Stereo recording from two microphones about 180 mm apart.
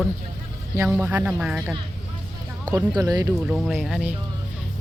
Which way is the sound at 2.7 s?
20° right (ahead or behind).